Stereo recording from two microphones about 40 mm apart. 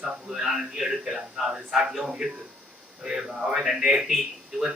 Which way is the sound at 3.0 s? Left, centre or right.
Centre.